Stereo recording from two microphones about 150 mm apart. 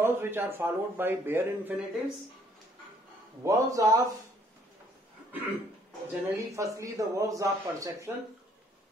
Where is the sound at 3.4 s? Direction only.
20° right (ahead or behind).